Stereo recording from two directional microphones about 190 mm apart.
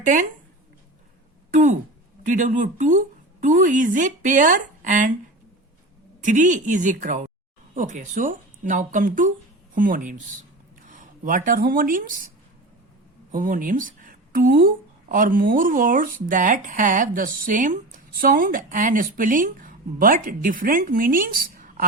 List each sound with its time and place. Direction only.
0.0 s speech: 40° right (ahead or behind)
2.3 s speech: 40° right (ahead or behind)
6.2 s speech: 40° right (ahead or behind)
13.3 s speech: 45° right (ahead or behind)